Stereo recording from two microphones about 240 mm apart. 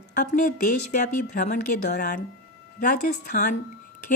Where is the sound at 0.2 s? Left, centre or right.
Left.